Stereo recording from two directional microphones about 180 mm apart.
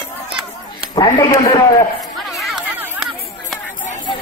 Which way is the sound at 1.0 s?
25° left (ahead or behind).